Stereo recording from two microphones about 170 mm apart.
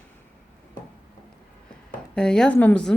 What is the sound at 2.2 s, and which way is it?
Speech, 5° left (ahead or behind).